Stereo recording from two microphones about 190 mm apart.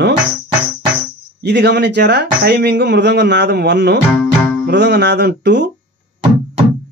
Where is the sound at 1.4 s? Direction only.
65° right (ahead or behind).